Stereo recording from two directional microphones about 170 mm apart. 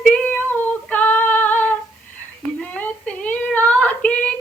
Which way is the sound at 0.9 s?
10° left (ahead or behind).